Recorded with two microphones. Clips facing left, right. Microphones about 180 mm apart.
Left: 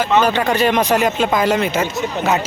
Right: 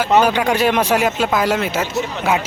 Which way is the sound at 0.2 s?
10° right (ahead or behind).